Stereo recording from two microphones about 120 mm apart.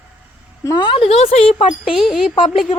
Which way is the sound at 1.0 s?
55° left (ahead or behind).